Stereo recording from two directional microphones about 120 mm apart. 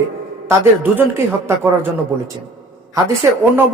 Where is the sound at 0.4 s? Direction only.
15° right (ahead or behind).